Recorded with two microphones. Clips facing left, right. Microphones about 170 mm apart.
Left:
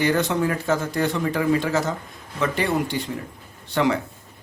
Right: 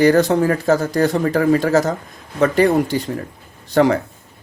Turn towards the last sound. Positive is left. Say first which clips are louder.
# right 7 dB
turn(degrees=-40)  # may be behind; listen again after turning